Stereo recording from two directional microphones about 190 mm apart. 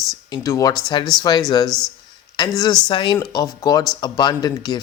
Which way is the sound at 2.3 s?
20° left (ahead or behind).